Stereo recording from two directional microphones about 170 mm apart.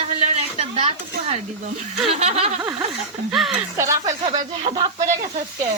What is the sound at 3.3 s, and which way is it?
Speech, centre (ahead or behind).